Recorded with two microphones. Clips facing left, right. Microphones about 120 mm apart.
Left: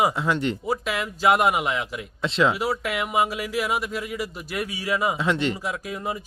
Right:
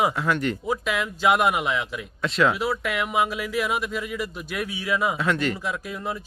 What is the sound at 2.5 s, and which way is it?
Speech, 10° left (ahead or behind).